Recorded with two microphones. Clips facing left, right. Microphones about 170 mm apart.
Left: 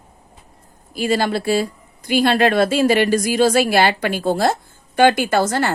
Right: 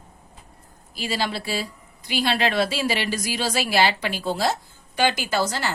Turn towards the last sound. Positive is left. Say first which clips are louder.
# left 7 dB
turn(degrees=50)  # may be behind; listen again after turning